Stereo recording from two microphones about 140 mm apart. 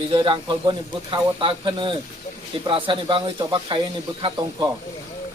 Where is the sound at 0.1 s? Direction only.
35° right (ahead or behind).